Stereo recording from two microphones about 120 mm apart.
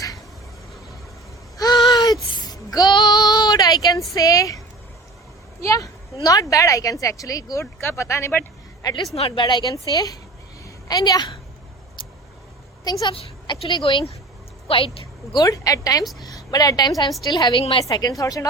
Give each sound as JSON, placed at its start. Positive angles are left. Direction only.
{"t": 1.5, "sound": "a sound", "side_deg": 30}
{"t": 2.4, "sound": "child singing", "side_deg": 30}
{"t": 4.1, "sound": "speech", "side_deg": 30}
{"t": 5.6, "sound": "speech", "side_deg": 30}
{"t": 9.1, "sound": "a woman's voice", "side_deg": 55}
{"t": 9.4, "sound": "a woman's voice", "side_deg": 40}
{"t": 10.6, "sound": "a sound", "side_deg": 35}
{"t": 12.8, "sound": "a woman's voice", "side_deg": 35}
{"t": 14.7, "sound": "a woman's voice", "side_deg": 50}
{"t": 15.3, "sound": "a woman's voice", "side_deg": 30}
{"t": 17.8, "sound": "a woman's voice", "side_deg": 35}